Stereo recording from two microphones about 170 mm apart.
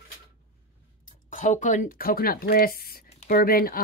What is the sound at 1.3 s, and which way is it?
Speech, 45° left (ahead or behind).